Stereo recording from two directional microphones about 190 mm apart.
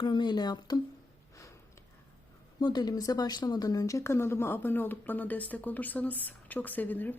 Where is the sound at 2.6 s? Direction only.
20° left (ahead or behind).